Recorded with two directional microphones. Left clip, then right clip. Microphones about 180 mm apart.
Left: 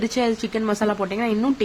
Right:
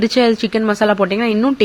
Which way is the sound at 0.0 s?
20° right (ahead or behind).